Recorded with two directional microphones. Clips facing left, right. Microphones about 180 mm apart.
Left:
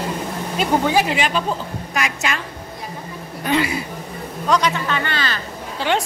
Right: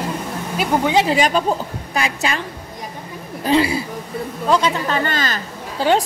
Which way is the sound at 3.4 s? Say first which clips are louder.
Right 4 dB; 30° right (ahead or behind).